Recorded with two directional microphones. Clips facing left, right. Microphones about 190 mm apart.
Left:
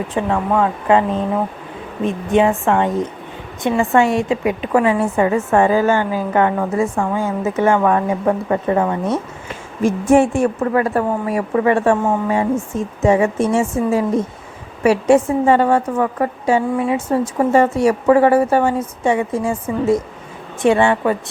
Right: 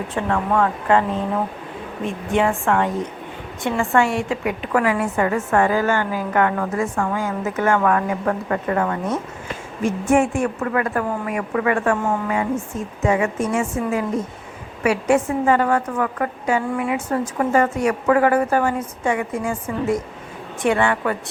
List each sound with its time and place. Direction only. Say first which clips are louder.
0.1 s speech: left 2 dB; 15° left (ahead or behind)
2.0 s a woman's voice: left 5 dB; 20° left (ahead or behind)
9.8 s a woman's voice: left 5 dB; 35° left (ahead or behind)